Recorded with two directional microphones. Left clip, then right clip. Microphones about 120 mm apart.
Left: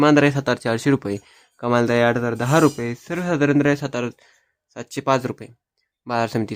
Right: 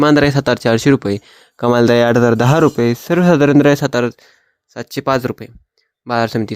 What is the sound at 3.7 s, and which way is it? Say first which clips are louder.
Speech: right 8 dB; 75° right (ahead or behind).